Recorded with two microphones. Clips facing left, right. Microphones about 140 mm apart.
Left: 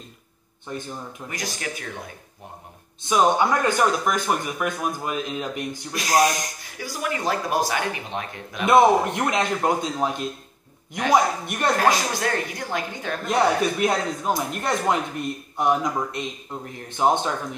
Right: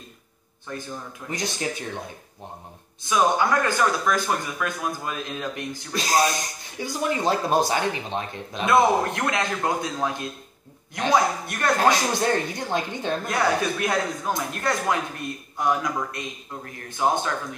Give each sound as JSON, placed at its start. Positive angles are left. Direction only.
{"t": 0.7, "sound": "speech", "side_deg": 20}
{"t": 1.3, "sound": "speech", "side_deg": -25}
{"t": 3.0, "sound": "speech", "side_deg": 20}
{"t": 6.3, "sound": "speech", "side_deg": -25}
{"t": 8.6, "sound": "speech", "side_deg": 20}
{"t": 11.8, "sound": "speech", "side_deg": -25}
{"t": 13.3, "sound": "speech", "side_deg": 20}